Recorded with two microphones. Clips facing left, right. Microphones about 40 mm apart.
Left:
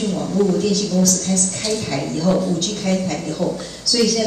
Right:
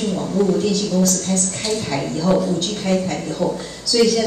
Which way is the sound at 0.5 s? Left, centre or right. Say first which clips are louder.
Even; right.